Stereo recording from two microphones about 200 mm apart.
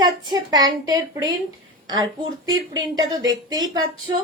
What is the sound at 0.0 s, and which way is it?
A woman's voice, 20° right (ahead or behind).